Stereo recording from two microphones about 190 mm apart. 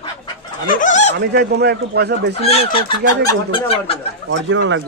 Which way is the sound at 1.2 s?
60° right (ahead or behind).